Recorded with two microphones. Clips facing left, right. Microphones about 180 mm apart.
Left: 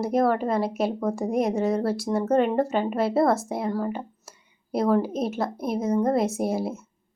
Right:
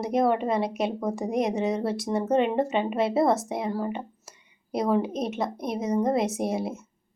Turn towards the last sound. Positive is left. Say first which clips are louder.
# left 2 dB
turn(degrees=0)  # may be behind; listen again after turning